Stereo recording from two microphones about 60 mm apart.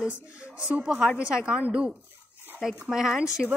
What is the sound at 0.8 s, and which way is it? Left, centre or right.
A woman's voice, centre.